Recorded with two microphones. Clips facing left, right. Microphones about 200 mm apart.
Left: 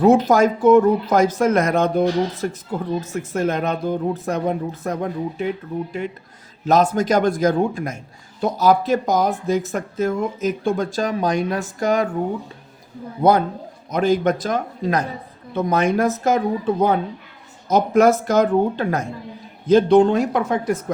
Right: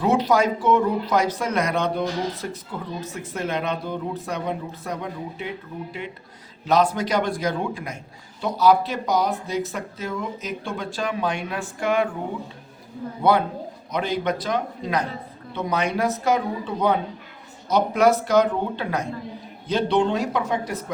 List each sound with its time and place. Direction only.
0.0 s speech: 50° left (ahead or behind)
13.2 s speech: 45° left (ahead or behind)